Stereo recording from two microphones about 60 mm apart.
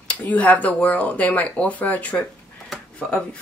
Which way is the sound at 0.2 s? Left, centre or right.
Left.